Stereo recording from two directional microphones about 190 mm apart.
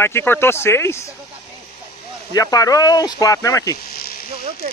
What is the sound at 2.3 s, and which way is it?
Speech, 20° left (ahead or behind).